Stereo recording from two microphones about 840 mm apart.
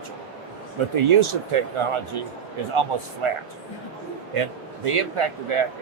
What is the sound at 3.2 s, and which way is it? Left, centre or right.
Speech, right.